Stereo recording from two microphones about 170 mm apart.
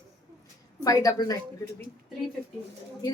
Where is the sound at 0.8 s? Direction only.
20° left (ahead or behind).